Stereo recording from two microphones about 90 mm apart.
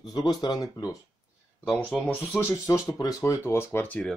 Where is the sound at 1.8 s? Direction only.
20° left (ahead or behind).